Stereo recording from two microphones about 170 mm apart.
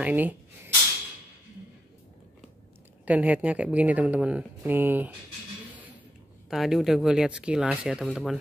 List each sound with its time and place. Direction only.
0.0 s speech: 10° right (ahead or behind)
3.1 s speech: 10° right (ahead or behind)
6.5 s speech: centre (ahead or behind)